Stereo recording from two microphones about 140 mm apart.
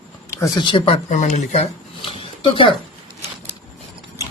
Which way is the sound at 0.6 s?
35° left (ahead or behind).